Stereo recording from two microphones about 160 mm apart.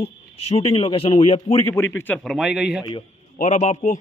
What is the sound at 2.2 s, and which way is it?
Speech, centre (ahead or behind).